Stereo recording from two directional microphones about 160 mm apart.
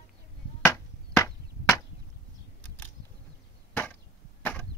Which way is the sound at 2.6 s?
10° left (ahead or behind).